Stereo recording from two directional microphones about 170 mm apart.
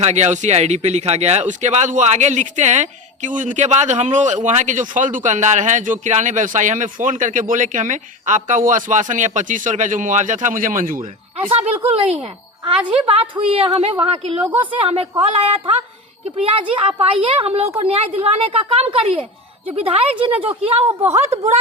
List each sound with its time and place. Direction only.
0.0 s speech: 40° right (ahead or behind)
11.3 s a woman's voice: 35° right (ahead or behind)
13.1 s a woman's voice: 30° right (ahead or behind)
14.4 s a woman's voice: 10° right (ahead or behind)
14.7 s a woman's voice: 35° right (ahead or behind)
20.8 s a woman's voice: 15° right (ahead or behind)